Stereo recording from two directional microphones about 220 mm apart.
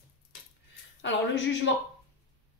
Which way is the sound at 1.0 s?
55° left (ahead or behind).